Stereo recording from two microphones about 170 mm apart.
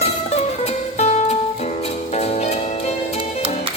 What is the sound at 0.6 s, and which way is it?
Music, 40° left (ahead or behind).